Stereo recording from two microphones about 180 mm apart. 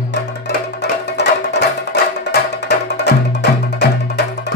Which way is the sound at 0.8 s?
70° left (ahead or behind).